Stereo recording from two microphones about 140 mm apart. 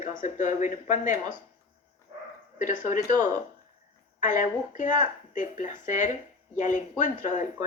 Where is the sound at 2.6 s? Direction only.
60° left (ahead or behind).